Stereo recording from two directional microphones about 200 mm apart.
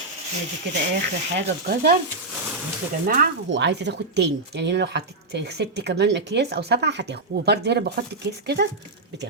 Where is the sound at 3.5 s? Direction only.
60° right (ahead or behind).